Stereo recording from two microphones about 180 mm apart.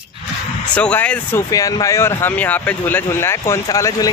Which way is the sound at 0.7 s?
5° left (ahead or behind).